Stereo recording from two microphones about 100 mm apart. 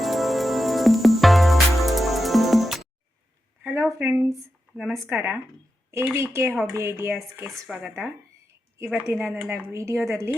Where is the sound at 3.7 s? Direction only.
20° right (ahead or behind).